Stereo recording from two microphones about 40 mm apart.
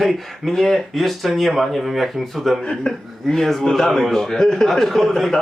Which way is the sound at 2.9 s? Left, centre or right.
Left.